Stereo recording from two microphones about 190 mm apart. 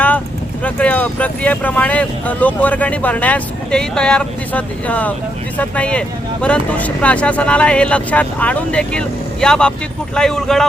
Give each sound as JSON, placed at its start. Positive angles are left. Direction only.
{"t": 0.6, "sound": "speech", "side_deg": 5}